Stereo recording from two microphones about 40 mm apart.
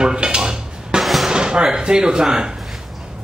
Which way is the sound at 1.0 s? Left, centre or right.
Centre.